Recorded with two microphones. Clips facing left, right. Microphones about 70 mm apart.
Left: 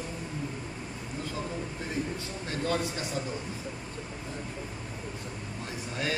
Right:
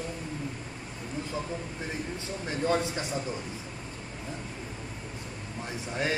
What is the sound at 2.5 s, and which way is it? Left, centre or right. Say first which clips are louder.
Speech: right 3 dB; right.